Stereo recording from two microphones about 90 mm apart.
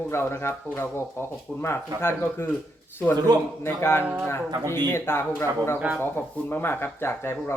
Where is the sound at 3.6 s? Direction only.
25° left (ahead or behind).